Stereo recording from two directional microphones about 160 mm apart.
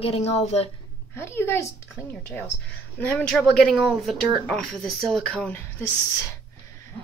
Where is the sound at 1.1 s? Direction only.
15° left (ahead or behind).